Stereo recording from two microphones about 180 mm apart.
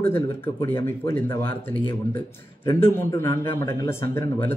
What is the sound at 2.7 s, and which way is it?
Speech, 15° left (ahead or behind).